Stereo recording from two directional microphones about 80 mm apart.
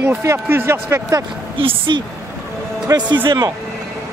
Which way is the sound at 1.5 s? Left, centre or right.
Right.